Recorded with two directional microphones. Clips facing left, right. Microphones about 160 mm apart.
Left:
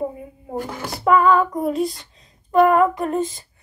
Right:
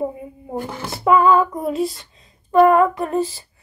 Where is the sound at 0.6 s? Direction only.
25° right (ahead or behind).